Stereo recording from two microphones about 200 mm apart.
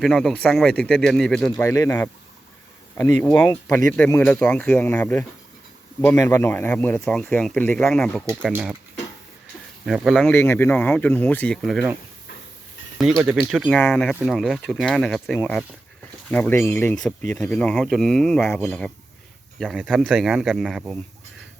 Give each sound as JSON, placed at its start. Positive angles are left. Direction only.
{"t": 0.0, "sound": "speech", "side_deg": 0}
{"t": 1.6, "sound": "speech", "side_deg": 15}
{"t": 3.2, "sound": "speech", "side_deg": 10}
{"t": 3.9, "sound": "speech", "side_deg": 5}
{"t": 8.3, "sound": "speech", "side_deg": -10}
{"t": 9.8, "sound": "speech", "side_deg": 0}
{"t": 13.5, "sound": "speech", "side_deg": 0}